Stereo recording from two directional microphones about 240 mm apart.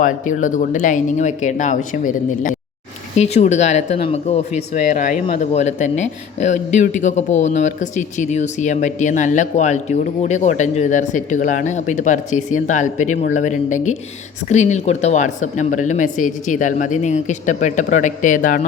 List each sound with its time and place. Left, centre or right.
0.0 s a man's voice: left